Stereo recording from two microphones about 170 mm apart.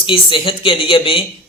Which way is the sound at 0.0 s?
30° left (ahead or behind).